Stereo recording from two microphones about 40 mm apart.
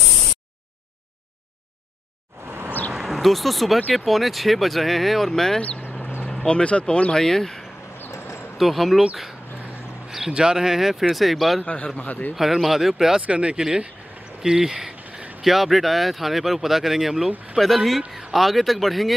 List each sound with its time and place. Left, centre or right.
2.4 s a sound: right
2.9 s speech: centre
6.4 s speech: left; by 7.6 s centre
8.0 s a sound: left
8.5 s speech: centre
10.0 s a sound: centre
10.3 s speech: centre
11.6 s a man's voice: left
12.0 s a man's voice: left
12.4 s speech: centre
13.3 s speech: right
13.6 s speech: centre
17.6 s speech: centre